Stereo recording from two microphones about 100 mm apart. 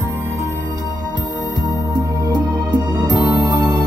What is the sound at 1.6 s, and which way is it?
Music, 45° right (ahead or behind).